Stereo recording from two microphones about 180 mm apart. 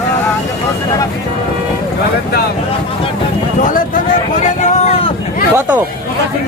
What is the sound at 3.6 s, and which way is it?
Speech, 50° left (ahead or behind).